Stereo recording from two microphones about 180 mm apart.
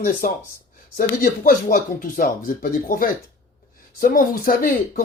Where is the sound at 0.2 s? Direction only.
50° left (ahead or behind).